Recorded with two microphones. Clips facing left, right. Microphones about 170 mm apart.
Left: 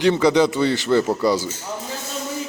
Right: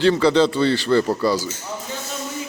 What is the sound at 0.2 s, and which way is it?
Speech, 15° left (ahead or behind).